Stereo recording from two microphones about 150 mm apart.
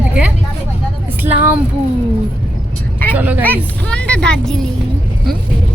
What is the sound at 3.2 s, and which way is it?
Speech, 10° right (ahead or behind).